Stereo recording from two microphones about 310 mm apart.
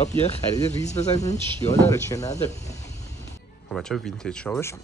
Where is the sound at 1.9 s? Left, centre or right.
Centre.